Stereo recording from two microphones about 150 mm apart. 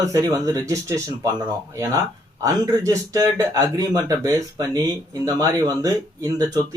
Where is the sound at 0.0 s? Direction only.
20° right (ahead or behind).